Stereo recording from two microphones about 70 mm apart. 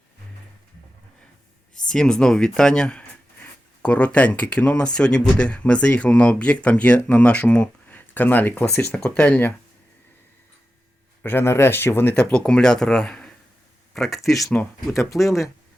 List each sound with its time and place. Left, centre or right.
1.9 s speech: centre
11.2 s speech: left
11.4 s speech: left
12.3 s speech: centre
14.5 s speech: left
15.1 s speech: centre